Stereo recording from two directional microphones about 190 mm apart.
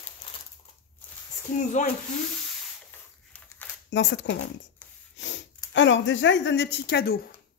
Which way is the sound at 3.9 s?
70° left (ahead or behind).